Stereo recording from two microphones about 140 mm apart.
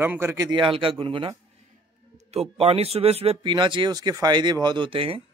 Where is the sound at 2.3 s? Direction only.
45° right (ahead or behind).